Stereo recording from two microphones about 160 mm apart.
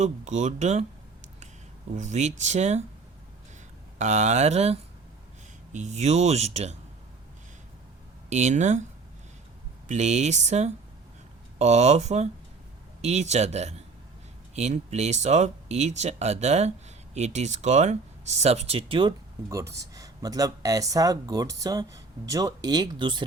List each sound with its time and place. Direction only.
0.0 s speech: 45° right (ahead or behind)
2.0 s speech: 50° right (ahead or behind)
3.9 s speech: 45° right (ahead or behind)
8.3 s speech: 45° right (ahead or behind)
9.9 s speech: 45° right (ahead or behind)
19.5 s speech: 20° right (ahead or behind)